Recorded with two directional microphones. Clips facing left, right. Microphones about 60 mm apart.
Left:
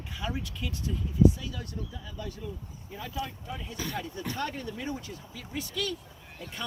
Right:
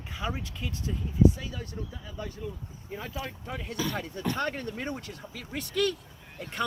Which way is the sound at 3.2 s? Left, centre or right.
Right.